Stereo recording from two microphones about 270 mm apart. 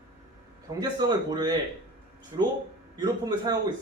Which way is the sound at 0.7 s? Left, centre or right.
Centre.